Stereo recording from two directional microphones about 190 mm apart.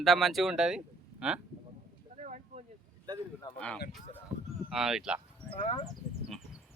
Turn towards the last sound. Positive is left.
turn(degrees=0)  # may be behind; listen again after turning